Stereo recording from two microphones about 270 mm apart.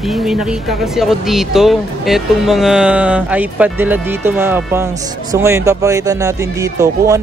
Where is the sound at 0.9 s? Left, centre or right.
Centre.